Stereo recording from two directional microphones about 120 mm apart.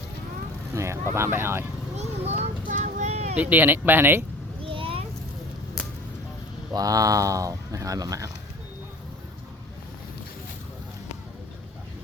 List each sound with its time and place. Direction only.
0.7 s speech: 25° right (ahead or behind)
2.0 s vehicle: 60° right (ahead or behind)
3.3 s speech: 15° right (ahead or behind)
4.6 s a sound: 50° right (ahead or behind)
6.7 s speech: 30° right (ahead or behind)